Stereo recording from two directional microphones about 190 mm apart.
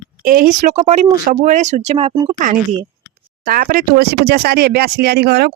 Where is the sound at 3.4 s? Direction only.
50° right (ahead or behind).